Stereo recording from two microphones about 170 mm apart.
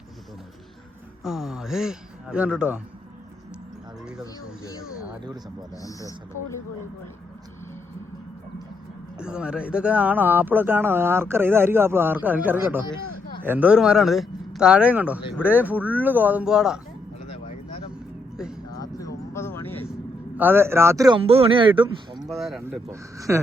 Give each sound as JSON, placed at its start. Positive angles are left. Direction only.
{"t": 1.2, "sound": "speech", "side_deg": -5}
{"t": 5.7, "sound": "speech", "side_deg": 20}
{"t": 9.1, "sound": "speech", "side_deg": -5}
{"t": 17.2, "sound": "a sound", "side_deg": 30}
{"t": 18.3, "sound": "music", "side_deg": -5}
{"t": 18.8, "sound": "a sound", "side_deg": 20}
{"t": 19.9, "sound": "a sound", "side_deg": -10}
{"t": 21.2, "sound": "speech", "side_deg": -35}
{"t": 22.3, "sound": "speech", "side_deg": 0}
{"t": 22.9, "sound": "speech", "side_deg": -15}